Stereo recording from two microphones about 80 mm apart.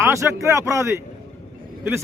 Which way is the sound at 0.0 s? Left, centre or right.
Right.